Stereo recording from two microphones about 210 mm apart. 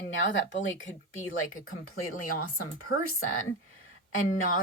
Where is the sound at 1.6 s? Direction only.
90° left.